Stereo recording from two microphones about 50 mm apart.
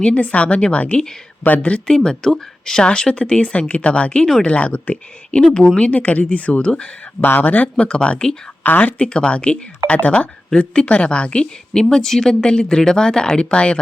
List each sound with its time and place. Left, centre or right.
0.0 s speech: left
2.0 s speech: centre
7.2 s speech: left
7.8 s speech: left
8.6 s speech: left
9.0 s speech: left